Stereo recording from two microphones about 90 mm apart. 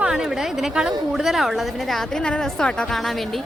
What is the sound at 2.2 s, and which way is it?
Speech, 10° left (ahead or behind).